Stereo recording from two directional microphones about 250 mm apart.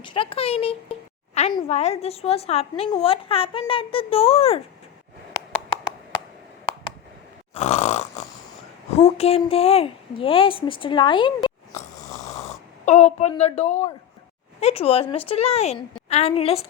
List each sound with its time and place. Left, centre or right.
0.0 s a woman's voice: centre
7.5 s grunt: left
9.0 s a woman's voice: left
11.4 s a sound: left
12.8 s a woman's voice: left